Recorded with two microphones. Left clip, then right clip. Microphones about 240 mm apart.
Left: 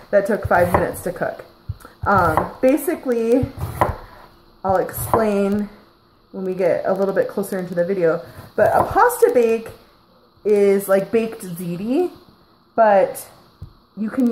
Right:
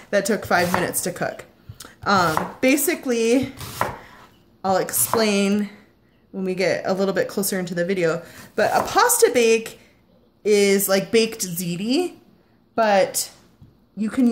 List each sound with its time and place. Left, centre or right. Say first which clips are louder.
0.1 s speech: left 3 dB; right
4.6 s speech: left 2 dB; right